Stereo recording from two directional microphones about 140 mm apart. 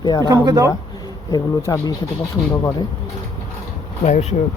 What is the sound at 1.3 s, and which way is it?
Speech, 25° left (ahead or behind).